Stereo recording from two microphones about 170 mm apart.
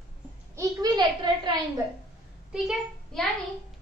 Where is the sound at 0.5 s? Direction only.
25° right (ahead or behind).